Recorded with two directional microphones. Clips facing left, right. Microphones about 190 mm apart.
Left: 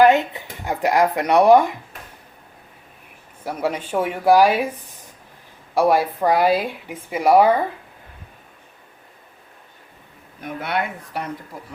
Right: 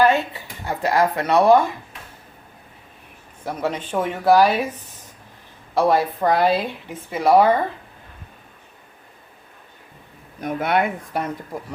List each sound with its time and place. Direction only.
0.0 s speech: 20° left (ahead or behind)
3.4 s speech: 10° left (ahead or behind)
5.7 s speech: 10° left (ahead or behind)
10.4 s speech: 45° right (ahead or behind)